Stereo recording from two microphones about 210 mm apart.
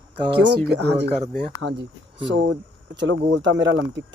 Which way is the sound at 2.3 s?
55° right (ahead or behind).